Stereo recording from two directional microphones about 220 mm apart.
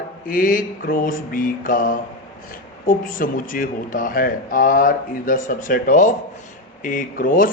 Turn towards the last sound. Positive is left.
turn(degrees=40)  # may be behind; listen again after turning